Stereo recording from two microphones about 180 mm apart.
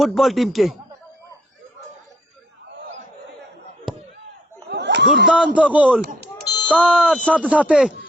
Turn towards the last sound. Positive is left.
turn(degrees=-5)  # may be behind; listen again after turning